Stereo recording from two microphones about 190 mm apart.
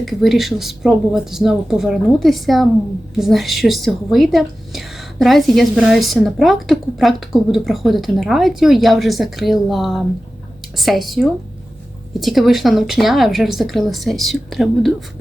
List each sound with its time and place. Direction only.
0.0 s a woman's voice: centre (ahead or behind)